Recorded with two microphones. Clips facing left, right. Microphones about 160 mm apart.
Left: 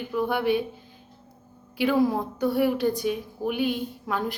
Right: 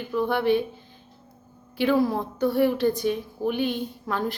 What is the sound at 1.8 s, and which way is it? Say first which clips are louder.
A woman's voice: even; 10° left (ahead or behind).